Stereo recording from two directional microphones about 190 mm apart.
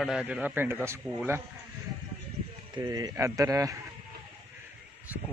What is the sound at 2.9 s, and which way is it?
Speech, 20° right (ahead or behind).